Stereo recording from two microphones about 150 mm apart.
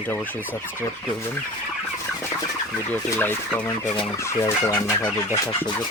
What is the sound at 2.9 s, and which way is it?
Speech, 10° left (ahead or behind).